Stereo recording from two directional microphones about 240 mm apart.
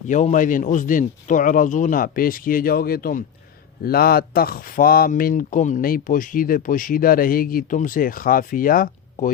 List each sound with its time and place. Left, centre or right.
0.1 s speech: left